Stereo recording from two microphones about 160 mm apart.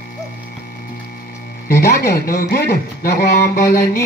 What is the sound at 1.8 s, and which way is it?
Speech, 85° left.